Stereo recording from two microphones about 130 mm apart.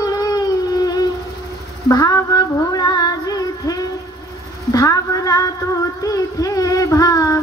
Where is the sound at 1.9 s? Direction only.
25° left (ahead or behind).